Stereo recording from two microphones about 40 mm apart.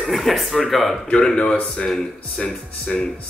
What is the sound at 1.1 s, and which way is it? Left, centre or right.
Speech, centre.